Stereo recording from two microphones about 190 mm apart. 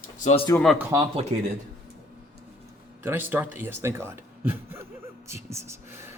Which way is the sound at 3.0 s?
10° right (ahead or behind).